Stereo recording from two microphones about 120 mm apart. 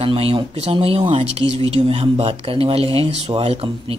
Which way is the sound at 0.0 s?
50° right (ahead or behind).